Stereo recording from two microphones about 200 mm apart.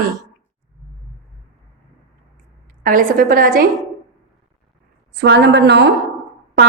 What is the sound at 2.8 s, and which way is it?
Speech, 45° right (ahead or behind).